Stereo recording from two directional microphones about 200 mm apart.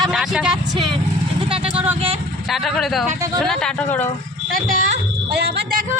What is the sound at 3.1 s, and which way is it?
Speech, 15° right (ahead or behind).